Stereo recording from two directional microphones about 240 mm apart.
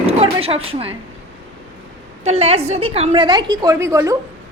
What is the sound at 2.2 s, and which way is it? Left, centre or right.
A woman's voice, right.